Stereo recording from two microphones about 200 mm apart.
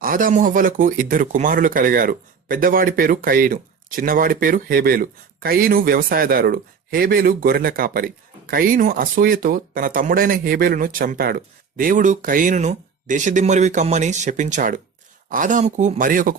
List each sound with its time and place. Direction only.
0.0 s speech: 45° right (ahead or behind)